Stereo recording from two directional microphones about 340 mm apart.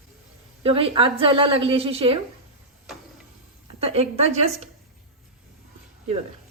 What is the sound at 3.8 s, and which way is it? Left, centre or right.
Speech, centre.